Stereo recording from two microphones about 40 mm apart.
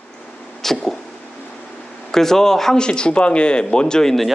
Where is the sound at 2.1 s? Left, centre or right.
Centre.